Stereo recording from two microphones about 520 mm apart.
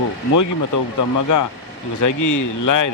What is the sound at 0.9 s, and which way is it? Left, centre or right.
Speech, left.